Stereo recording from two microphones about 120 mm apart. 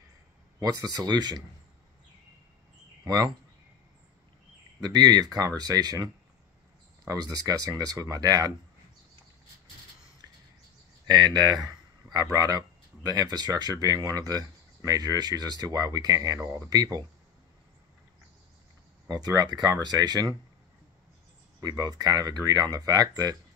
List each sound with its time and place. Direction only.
0.6 s speech: 30° right (ahead or behind)
3.1 s speech: 30° right (ahead or behind)
4.8 s speech: 35° right (ahead or behind)
7.1 s speech: 30° right (ahead or behind)
11.1 s speech: 35° right (ahead or behind)
19.0 s speech: 35° right (ahead or behind)
21.5 s speech: 30° right (ahead or behind)